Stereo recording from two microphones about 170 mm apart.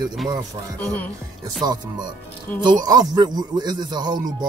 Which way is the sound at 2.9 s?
25° right (ahead or behind).